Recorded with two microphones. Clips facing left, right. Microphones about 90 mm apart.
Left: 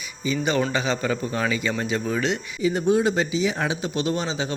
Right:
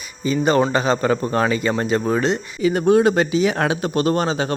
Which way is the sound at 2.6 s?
65° right (ahead or behind).